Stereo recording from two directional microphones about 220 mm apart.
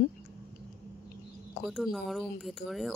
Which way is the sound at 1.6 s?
Centre (ahead or behind).